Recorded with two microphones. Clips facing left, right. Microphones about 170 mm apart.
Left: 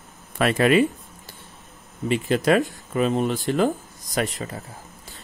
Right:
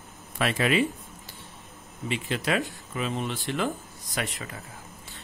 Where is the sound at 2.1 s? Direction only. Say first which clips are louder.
Left 8 dB; 45° left (ahead or behind).